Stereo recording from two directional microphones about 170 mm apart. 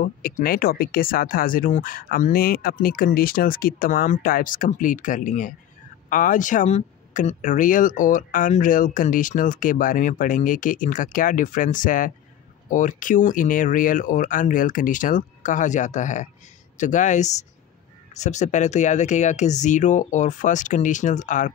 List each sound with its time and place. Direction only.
0.0 s speech: 55° left (ahead or behind)